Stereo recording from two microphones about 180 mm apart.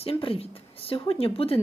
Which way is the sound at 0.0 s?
30° left (ahead or behind).